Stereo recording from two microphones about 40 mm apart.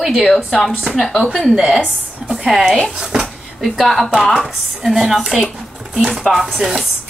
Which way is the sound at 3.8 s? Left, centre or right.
Centre.